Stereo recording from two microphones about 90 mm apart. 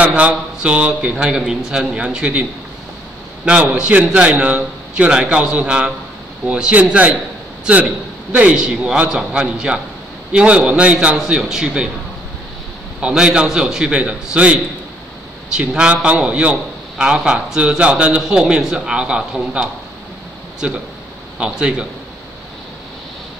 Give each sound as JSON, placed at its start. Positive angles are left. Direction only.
{"t": 0.0, "sound": "a man's voice", "side_deg": -15}
{"t": 3.4, "sound": "a man's voice", "side_deg": -10}
{"t": 8.3, "sound": "a man's voice", "side_deg": -15}
{"t": 13.0, "sound": "a man's voice", "side_deg": -10}